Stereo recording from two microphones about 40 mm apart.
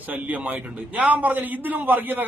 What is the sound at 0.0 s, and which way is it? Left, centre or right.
A man's voice, right.